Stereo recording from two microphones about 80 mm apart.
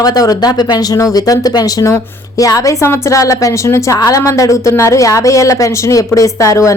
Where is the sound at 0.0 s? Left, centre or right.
Left.